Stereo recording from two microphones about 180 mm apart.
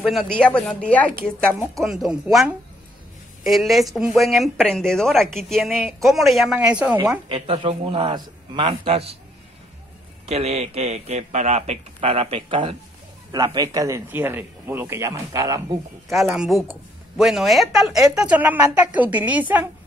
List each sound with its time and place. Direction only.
0.0 s a woman's voice: centre (ahead or behind)
7.2 s a man's voice: 30° right (ahead or behind)
10.2 s speech: 35° right (ahead or behind); by 15.8 s 20° right (ahead or behind)
16.1 s a woman's voice: centre (ahead or behind)